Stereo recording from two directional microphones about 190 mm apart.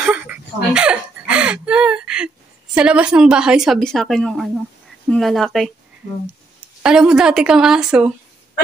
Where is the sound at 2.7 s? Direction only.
5° right (ahead or behind).